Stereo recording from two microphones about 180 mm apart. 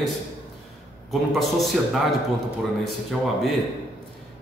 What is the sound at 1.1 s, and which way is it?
Speech, centre (ahead or behind).